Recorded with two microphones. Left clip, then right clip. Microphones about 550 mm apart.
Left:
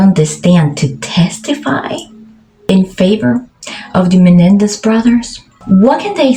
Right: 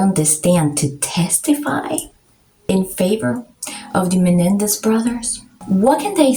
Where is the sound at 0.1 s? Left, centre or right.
Right.